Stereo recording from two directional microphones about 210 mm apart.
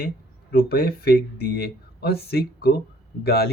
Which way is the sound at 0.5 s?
45° left (ahead or behind).